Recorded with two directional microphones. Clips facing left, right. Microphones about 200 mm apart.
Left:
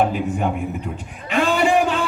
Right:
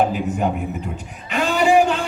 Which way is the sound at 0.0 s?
40° right (ahead or behind).